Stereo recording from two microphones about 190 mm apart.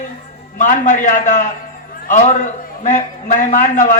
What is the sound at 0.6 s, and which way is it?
Speech, 40° left (ahead or behind).